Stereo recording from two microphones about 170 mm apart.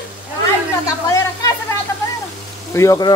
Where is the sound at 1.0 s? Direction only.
20° left (ahead or behind).